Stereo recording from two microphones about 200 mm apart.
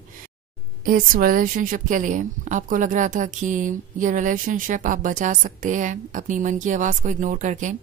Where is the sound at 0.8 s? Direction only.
45° right (ahead or behind).